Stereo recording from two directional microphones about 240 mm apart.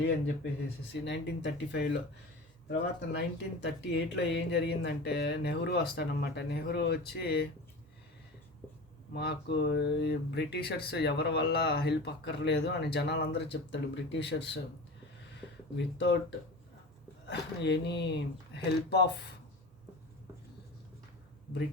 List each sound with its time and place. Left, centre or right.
1.0 s speech: left
9.1 s speech: left
15.8 s speech: left
17.2 s speech: left